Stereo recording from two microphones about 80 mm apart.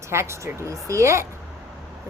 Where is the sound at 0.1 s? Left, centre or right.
Right.